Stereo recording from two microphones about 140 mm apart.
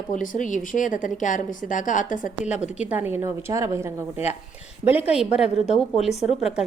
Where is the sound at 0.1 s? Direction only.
70° left (ahead or behind).